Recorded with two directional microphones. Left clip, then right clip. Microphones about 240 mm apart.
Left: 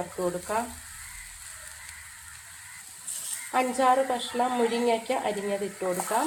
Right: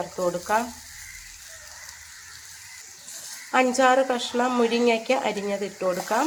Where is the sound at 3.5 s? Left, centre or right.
Right.